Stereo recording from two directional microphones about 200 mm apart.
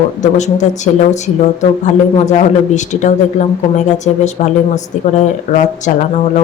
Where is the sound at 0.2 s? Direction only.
35° left (ahead or behind).